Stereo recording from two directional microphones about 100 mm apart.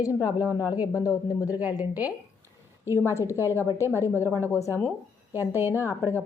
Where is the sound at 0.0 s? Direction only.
40° left (ahead or behind).